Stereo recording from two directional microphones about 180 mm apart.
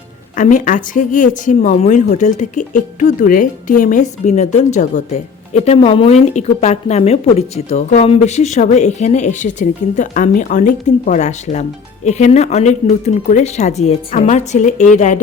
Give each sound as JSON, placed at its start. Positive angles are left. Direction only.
{"t": 0.3, "sound": "speech", "side_deg": 45}